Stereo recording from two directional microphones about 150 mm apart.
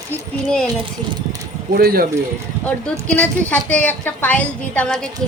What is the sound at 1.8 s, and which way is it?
Speech, 80° right.